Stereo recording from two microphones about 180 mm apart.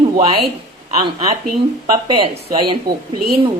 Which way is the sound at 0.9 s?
30° right (ahead or behind).